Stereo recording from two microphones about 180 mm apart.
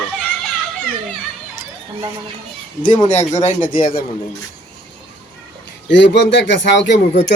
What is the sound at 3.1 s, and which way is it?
Speech, 40° left (ahead or behind).